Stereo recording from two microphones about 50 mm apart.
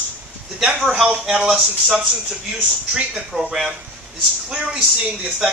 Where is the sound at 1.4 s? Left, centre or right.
Centre.